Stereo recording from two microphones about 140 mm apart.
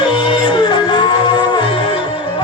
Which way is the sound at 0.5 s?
30° left (ahead or behind).